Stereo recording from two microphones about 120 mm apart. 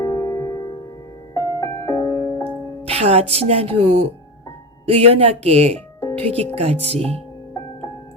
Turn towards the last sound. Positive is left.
turn(degrees=-60)  # may be behind; listen again after turning